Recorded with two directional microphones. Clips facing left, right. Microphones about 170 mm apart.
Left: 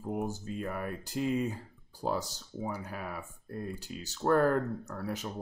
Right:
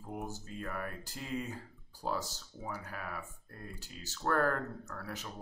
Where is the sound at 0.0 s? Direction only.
20° left (ahead or behind).